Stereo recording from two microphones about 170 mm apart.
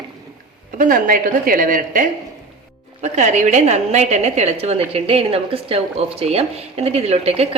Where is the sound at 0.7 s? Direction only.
55° right (ahead or behind).